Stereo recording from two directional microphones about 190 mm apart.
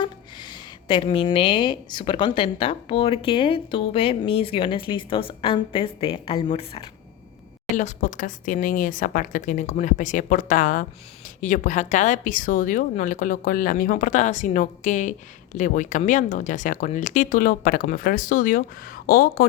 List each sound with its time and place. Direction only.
0.9 s a woman's voice: 25° left (ahead or behind)
7.8 s a woman's voice: 40° left (ahead or behind)